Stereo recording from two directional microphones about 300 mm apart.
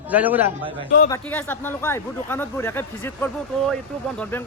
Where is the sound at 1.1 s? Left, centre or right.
Centre.